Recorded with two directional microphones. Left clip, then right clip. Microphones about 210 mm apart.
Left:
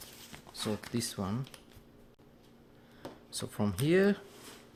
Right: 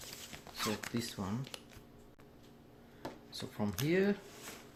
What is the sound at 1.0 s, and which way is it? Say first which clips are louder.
Speech: left 4 dB; 45° left (ahead or behind).